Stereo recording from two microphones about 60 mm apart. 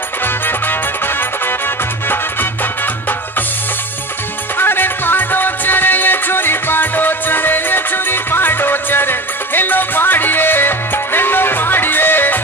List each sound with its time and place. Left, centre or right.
4.6 s music: left